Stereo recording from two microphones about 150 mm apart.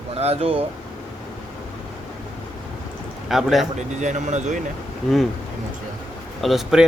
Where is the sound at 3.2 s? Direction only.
Centre (ahead or behind).